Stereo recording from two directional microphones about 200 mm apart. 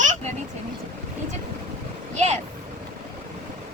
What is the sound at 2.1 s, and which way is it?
Speech, 35° right (ahead or behind).